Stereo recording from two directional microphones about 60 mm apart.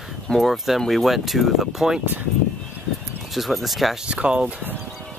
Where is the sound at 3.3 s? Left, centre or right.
Centre.